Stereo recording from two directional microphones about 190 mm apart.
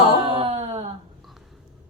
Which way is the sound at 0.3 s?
30° right (ahead or behind).